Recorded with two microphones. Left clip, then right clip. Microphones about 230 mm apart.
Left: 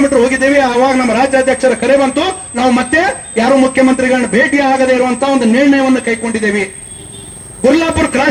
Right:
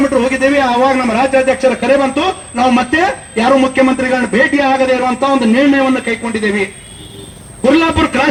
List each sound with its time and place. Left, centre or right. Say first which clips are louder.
0.1 s a man's voice: left 2 dB; left